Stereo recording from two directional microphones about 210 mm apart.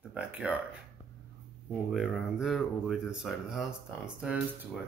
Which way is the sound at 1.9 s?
Centre (ahead or behind).